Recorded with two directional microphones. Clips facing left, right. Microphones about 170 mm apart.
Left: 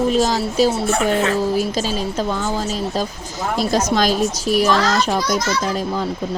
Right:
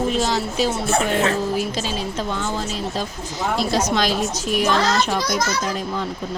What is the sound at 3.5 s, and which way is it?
A child's voice, 45° left (ahead or behind).